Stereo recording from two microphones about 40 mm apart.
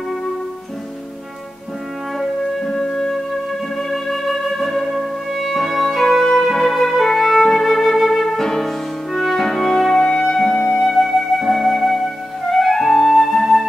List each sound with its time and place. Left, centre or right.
2.1 s music: centre
10.7 s flute: centre
12.4 s music: centre